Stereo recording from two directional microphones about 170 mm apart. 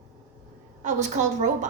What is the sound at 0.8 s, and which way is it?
Speech, 45° right (ahead or behind).